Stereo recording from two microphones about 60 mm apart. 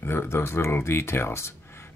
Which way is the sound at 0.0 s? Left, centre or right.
Left.